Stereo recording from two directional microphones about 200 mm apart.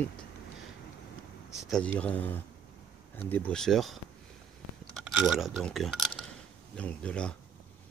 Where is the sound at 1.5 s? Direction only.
5° left (ahead or behind).